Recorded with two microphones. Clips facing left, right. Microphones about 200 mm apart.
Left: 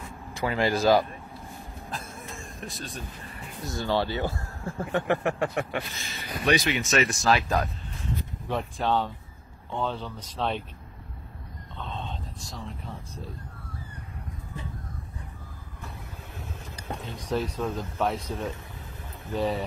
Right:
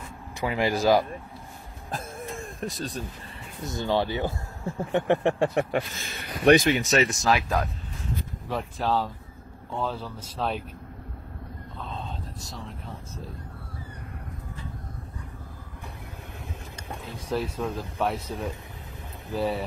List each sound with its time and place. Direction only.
0.3 s speech: 15° right (ahead or behind)
1.9 s throat clearing: 50° right (ahead or behind)
3.6 s speech: 20° right (ahead or behind); by 6.0 s 40° right (ahead or behind)
6.0 s speech: 55° right (ahead or behind); by 7.1 s 35° right (ahead or behind)
7.2 s speech: 10° right (ahead or behind)
11.8 s a sound: centre (ahead or behind)
17.0 s speech: centre (ahead or behind)